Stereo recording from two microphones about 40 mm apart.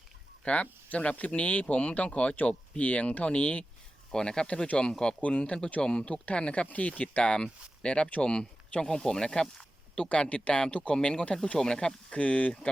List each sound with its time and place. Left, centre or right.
0.4 s speech: left
4.1 s speech: centre
10.1 s speech: left
12.2 s speech: left